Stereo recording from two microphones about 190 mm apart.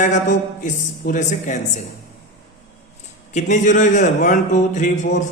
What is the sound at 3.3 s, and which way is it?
A man's voice, 40° left (ahead or behind).